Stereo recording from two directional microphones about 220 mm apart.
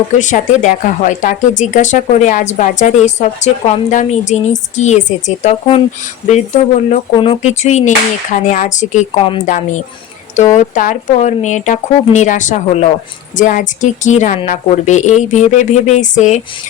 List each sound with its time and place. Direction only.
0.1 s speech: 35° left (ahead or behind)